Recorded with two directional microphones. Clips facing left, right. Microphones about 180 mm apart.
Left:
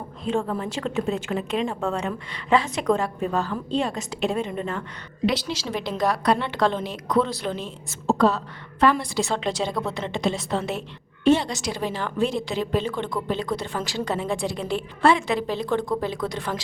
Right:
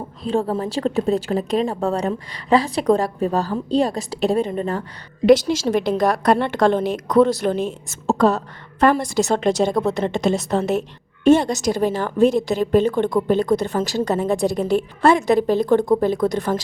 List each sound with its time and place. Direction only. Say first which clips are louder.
0.3 s a woman's voice: right 4 dB; 35° right (ahead or behind)
5.2 s a woman's voice: right 11 dB; 50° right (ahead or behind)